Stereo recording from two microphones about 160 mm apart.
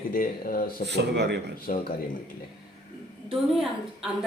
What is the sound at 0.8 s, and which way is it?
Speech, 90° right.